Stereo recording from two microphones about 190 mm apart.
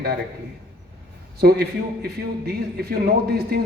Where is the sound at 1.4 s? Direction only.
55° right (ahead or behind).